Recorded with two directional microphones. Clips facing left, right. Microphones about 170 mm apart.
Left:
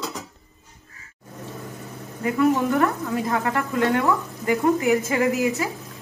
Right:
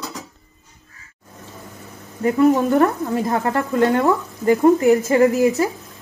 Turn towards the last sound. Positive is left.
turn(degrees=-35)  # may be behind; listen again after turning